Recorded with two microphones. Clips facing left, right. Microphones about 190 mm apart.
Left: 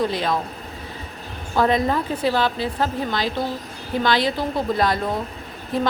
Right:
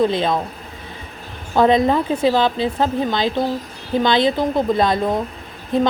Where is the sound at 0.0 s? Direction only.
25° right (ahead or behind).